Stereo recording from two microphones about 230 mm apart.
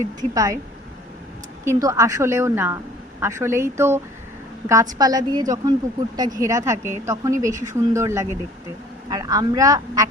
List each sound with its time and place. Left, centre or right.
0.2 s a woman's voice: centre
1.6 s a woman's voice: centre